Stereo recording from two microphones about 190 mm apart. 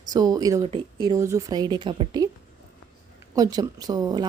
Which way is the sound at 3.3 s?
20° right (ahead or behind).